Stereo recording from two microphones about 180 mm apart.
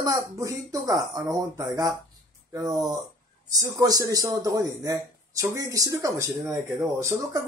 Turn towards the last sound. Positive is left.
turn(degrees=-20)  # may be behind; listen again after turning